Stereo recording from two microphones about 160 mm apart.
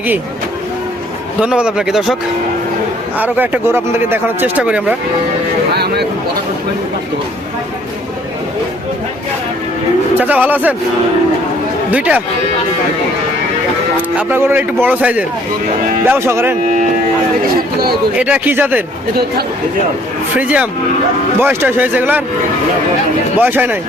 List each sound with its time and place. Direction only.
1.4 s speech: 5° right (ahead or behind)
3.2 s speech: 10° right (ahead or behind)
5.7 s a sound: 90° right
10.2 s speech: 10° right (ahead or behind)
11.9 s speech: 10° right (ahead or behind)
13.9 s speech: 10° right (ahead or behind)
18.2 s speech: 10° right (ahead or behind)
20.4 s speech: 10° right (ahead or behind)
23.4 s speech: 10° right (ahead or behind)